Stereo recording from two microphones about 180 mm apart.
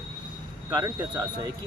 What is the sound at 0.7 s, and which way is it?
Speech, 25° right (ahead or behind).